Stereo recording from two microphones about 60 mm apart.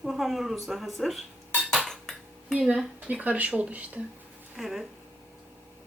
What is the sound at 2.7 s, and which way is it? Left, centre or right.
Speech, right.